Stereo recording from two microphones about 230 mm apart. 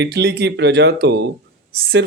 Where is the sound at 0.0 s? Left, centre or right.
Right.